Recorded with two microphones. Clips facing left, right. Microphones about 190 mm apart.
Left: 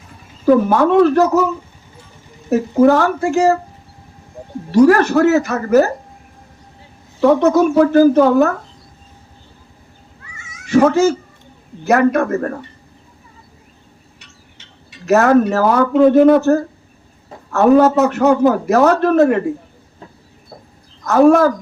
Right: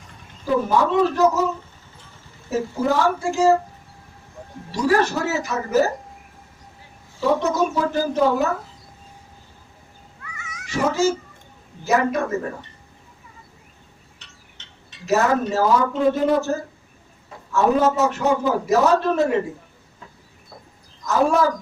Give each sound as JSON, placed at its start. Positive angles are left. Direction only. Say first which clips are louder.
{"t": 0.4, "sound": "a man's voice", "louder": "left 8 dB", "side_deg": 60}
{"t": 2.8, "sound": "a man's voice", "louder": "left 8 dB", "side_deg": 60}
{"t": 4.7, "sound": "a man's voice", "louder": "left 9 dB", "side_deg": 60}
{"t": 7.2, "sound": "a man's voice", "louder": "left 8 dB", "side_deg": 60}
{"t": 10.3, "sound": "cat", "louder": "right 4 dB", "side_deg": 25}
{"t": 10.7, "sound": "a man's voice", "louder": "left 8 dB", "side_deg": 60}
{"t": 14.6, "sound": "wind chime", "louder": "left 3 dB", "side_deg": 10}
{"t": 15.0, "sound": "a man's voice", "louder": "left 8 dB", "side_deg": 60}
{"t": 21.0, "sound": "a man's voice", "louder": "left 8 dB", "side_deg": 60}